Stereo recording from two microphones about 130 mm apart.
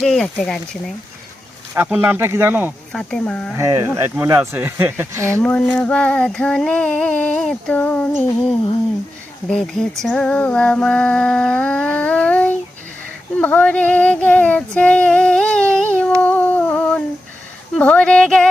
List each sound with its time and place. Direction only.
0.0 s speech: 5° left (ahead or behind)
1.7 s speech: 15° right (ahead or behind)
2.9 s female singing: 5° left (ahead or behind)
3.6 s speech: 20° right (ahead or behind)
5.4 s female singing: 10° left (ahead or behind)
9.5 s female singing: 5° left (ahead or behind)
16.2 s a sound: 10° left (ahead or behind)
17.7 s female singing: 10° left (ahead or behind)